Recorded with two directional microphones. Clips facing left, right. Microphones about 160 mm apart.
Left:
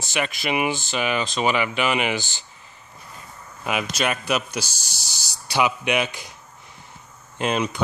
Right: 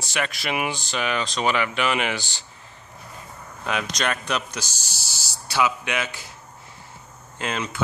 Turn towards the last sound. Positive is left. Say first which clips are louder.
# left 5 dB
turn(degrees=15)  # may be behind; listen again after turning